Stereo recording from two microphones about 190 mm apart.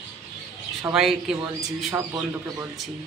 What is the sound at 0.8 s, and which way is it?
Speech, centre (ahead or behind).